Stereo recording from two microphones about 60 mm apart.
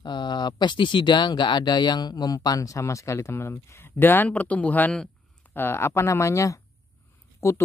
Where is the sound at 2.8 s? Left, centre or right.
Left.